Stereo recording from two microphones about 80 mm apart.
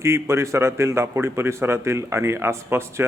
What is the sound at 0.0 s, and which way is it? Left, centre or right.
A man's voice, right.